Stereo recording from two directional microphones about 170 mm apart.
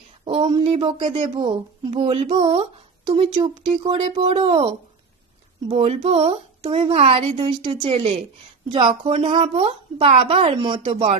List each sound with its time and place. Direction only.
0.3 s a woman's voice: 35° right (ahead or behind)
4.1 s a woman's voice: 40° right (ahead or behind)